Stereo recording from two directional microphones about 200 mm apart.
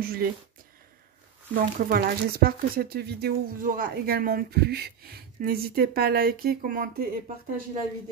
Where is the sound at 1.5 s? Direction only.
45° right (ahead or behind).